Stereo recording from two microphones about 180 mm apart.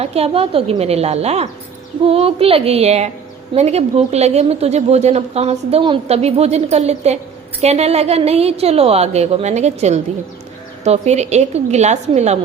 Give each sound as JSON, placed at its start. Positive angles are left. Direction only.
{"t": 0.0, "sound": "a woman's voice", "side_deg": -35}